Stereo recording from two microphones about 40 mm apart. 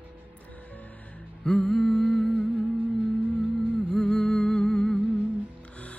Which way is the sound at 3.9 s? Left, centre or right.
Left.